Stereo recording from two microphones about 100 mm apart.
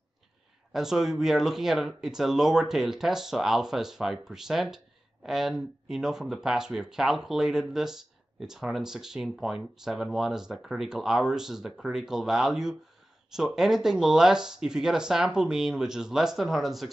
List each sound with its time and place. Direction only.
0.7 s speech: 5° right (ahead or behind)